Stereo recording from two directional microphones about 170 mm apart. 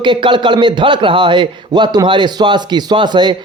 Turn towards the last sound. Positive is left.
turn(degrees=-25)  # may be behind; listen again after turning